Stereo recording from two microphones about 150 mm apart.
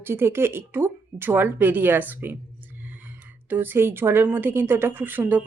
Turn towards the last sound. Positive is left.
turn(degrees=-10)  # may be behind; listen again after turning